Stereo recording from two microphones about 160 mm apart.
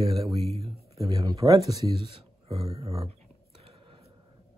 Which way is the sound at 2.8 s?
40° right (ahead or behind).